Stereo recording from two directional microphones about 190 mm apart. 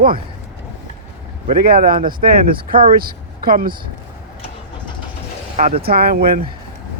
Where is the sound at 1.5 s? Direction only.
50° right (ahead or behind).